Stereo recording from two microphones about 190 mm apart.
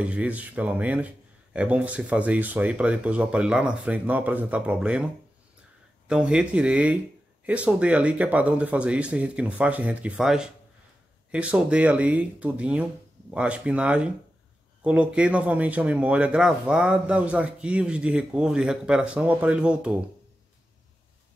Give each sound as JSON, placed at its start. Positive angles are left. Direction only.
{"t": 0.0, "sound": "speech", "side_deg": -5}
{"t": 6.0, "sound": "speech", "side_deg": -5}